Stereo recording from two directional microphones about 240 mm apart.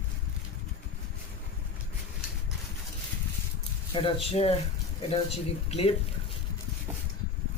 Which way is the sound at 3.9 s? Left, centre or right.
Left.